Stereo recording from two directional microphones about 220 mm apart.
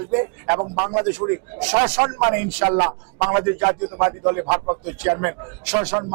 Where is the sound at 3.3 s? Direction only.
15° right (ahead or behind).